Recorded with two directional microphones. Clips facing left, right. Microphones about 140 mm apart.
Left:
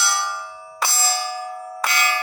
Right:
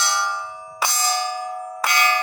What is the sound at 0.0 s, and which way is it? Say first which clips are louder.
Bell: right 1 dB; 20° right (ahead or behind).